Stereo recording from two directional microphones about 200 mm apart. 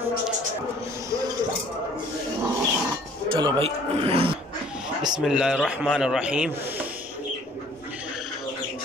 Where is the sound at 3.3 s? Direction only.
25° right (ahead or behind).